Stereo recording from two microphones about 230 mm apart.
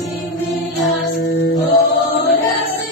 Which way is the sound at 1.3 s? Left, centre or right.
Left.